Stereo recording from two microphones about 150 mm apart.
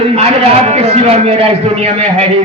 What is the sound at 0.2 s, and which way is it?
A man's voice, 45° right (ahead or behind).